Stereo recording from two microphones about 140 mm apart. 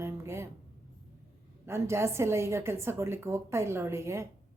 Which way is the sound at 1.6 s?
20° right (ahead or behind).